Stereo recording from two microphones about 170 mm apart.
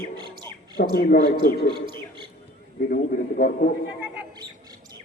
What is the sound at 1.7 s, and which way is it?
Speech, 30° right (ahead or behind).